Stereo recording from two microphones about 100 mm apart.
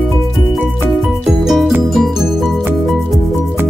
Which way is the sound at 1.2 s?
5° right (ahead or behind).